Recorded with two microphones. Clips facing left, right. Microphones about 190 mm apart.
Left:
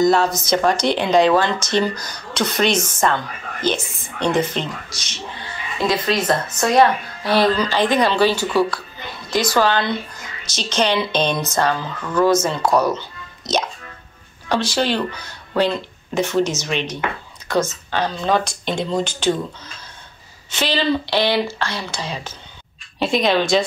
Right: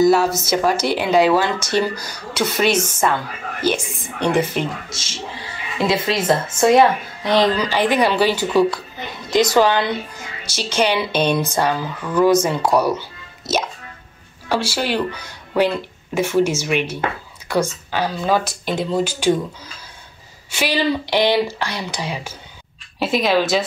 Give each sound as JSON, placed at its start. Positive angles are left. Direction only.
{"t": 0.0, "sound": "speech", "side_deg": -5}
{"t": 4.8, "sound": "speech", "side_deg": -25}
{"t": 14.5, "sound": "speech", "side_deg": -10}
{"t": 20.5, "sound": "speech", "side_deg": -10}